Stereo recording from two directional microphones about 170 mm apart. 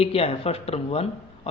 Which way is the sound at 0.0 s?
35° left (ahead or behind).